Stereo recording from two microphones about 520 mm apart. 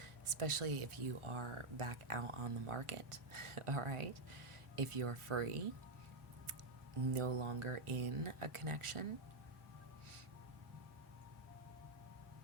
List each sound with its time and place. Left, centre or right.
0.0 s speech: right
7.1 s speech: right